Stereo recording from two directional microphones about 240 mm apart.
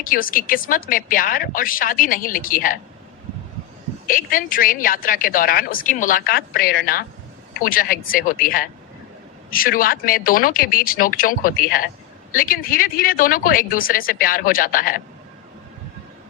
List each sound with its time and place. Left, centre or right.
0.0 s a woman's voice: left
4.0 s a woman's voice: left